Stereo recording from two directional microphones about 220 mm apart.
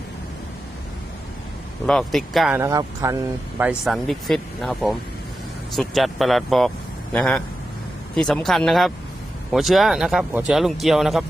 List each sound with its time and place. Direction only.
1.9 s speech: centre (ahead or behind); by 3.2 s 15° right (ahead or behind)
3.6 s speech: 5° right (ahead or behind)